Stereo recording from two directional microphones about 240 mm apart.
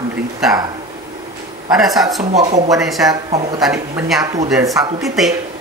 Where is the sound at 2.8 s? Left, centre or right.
Centre.